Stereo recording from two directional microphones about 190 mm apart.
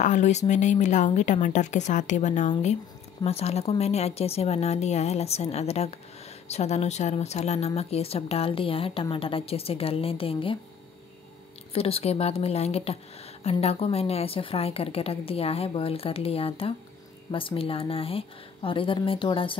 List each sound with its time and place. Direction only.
0.0 s speech: 40° left (ahead or behind)
11.7 s speech: 30° left (ahead or behind)